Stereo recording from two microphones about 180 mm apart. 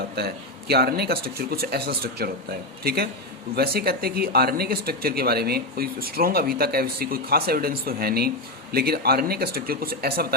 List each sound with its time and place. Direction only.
0.2 s speech: 60° right (ahead or behind)